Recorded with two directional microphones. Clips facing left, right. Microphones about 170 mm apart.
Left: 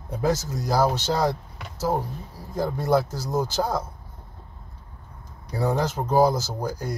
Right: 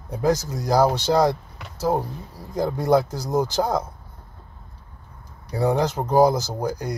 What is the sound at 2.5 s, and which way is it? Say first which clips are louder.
Speech: right 3 dB; 15° right (ahead or behind).